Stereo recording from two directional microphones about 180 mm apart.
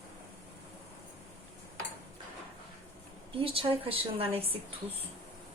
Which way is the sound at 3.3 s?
30° right (ahead or behind).